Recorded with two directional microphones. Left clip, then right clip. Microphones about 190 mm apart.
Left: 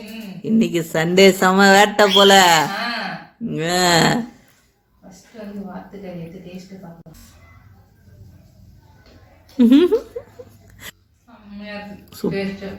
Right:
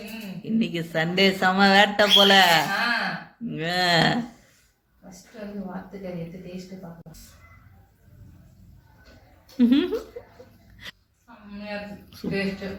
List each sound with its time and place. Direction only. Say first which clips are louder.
0.0 s a sound: left 2 dB; centre (ahead or behind)
0.4 s speech: left 8 dB; 35° left (ahead or behind)
2.6 s gasp: even; centre (ahead or behind)
3.4 s speech: left 6 dB; 35° left (ahead or behind)
6.6 s music: left 2 dB; centre (ahead or behind)
9.6 s speech: left 8 dB; 35° left (ahead or behind)
12.3 s speech: right 1 dB; centre (ahead or behind)